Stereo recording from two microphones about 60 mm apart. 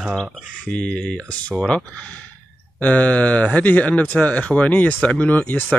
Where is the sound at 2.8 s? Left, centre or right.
Left.